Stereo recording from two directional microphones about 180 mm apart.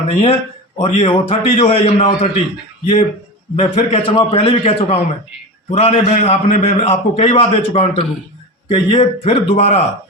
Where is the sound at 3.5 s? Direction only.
35° left (ahead or behind).